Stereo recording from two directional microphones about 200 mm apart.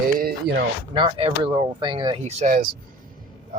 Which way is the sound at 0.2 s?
50° right (ahead or behind).